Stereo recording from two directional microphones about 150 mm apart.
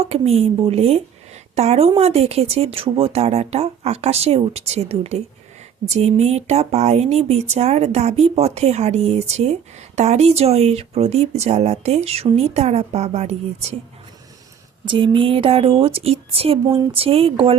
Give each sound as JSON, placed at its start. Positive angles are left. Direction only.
{"t": 0.0, "sound": "speech", "side_deg": -40}
{"t": 14.8, "sound": "speech", "side_deg": -35}